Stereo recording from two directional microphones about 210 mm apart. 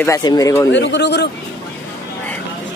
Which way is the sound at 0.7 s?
60° left (ahead or behind).